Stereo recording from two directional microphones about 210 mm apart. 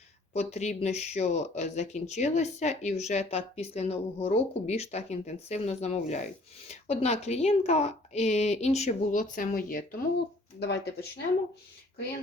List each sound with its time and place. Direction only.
0.3 s speech: 35° left (ahead or behind)
10.6 s speech: 50° left (ahead or behind)